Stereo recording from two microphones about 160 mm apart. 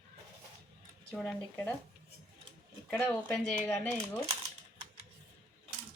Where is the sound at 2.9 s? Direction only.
10° left (ahead or behind).